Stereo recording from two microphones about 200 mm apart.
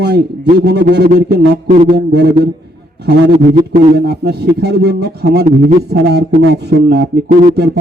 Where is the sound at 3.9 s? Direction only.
55° right (ahead or behind).